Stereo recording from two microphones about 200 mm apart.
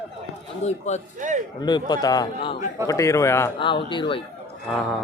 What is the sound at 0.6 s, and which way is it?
Speech, 35° left (ahead or behind).